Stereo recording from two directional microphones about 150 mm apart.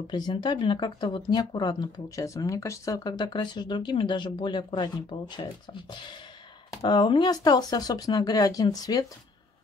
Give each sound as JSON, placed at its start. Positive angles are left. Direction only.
{"t": 0.1, "sound": "speech", "side_deg": 30}
{"t": 6.7, "sound": "speech", "side_deg": 25}